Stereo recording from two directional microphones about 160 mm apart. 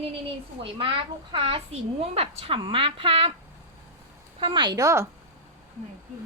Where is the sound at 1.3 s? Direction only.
30° right (ahead or behind).